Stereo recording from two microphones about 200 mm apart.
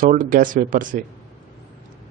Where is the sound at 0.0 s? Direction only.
45° right (ahead or behind).